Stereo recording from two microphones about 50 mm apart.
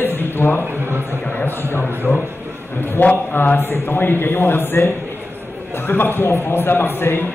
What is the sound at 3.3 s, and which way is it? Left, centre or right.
A man's voice, left.